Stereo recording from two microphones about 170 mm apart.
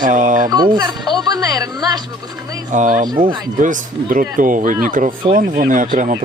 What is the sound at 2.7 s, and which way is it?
Speech, 45° right (ahead or behind).